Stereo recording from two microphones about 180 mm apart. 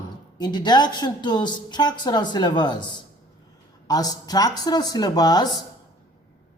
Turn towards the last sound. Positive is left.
turn(degrees=20)  # may be behind; listen again after turning